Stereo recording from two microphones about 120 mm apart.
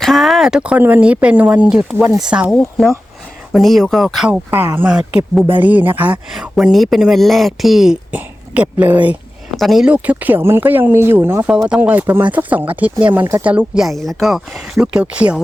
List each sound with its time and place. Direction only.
0.0 s speech: centre (ahead or behind)
4.3 s speech: 15° right (ahead or behind)
6.3 s speech: 5° right (ahead or behind)
9.6 s speech: centre (ahead or behind)